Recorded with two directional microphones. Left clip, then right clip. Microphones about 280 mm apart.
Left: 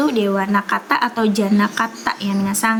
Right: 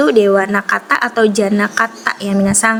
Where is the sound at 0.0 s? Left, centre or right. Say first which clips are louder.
Right 8 dB; centre.